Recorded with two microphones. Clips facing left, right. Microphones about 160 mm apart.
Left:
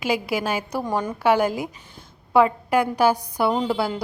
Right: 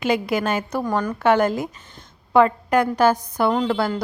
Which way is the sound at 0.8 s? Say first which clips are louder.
Right 1 dB; 20° left (ahead or behind).